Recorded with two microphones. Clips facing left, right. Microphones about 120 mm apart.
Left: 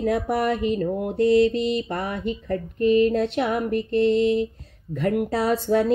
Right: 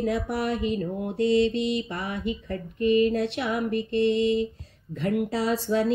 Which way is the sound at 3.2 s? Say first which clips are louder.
Left 4 dB; 50° left (ahead or behind).